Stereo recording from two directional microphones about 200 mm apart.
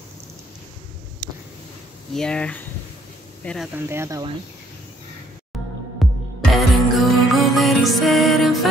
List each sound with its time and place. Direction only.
1.2 s a sound: 20° right (ahead or behind)
2.1 s speech: 5° left (ahead or behind)
3.9 s speech: 15° right (ahead or behind)
6.0 s music: centre (ahead or behind)